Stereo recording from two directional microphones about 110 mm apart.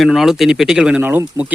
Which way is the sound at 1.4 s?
25° right (ahead or behind).